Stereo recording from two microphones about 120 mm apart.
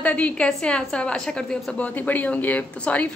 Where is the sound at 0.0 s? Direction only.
10° left (ahead or behind).